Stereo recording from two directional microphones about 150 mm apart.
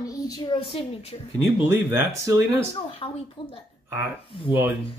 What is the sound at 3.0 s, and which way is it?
Speech, 40° left (ahead or behind).